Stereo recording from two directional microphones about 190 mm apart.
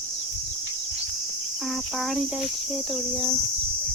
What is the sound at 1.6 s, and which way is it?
Cricket, centre (ahead or behind).